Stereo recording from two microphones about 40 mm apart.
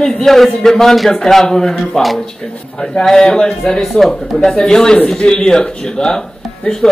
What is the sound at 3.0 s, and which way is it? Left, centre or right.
Speech, centre.